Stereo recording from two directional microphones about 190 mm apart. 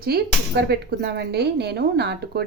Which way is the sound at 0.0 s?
55° right (ahead or behind).